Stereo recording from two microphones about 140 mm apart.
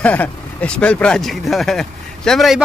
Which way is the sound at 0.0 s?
10° left (ahead or behind).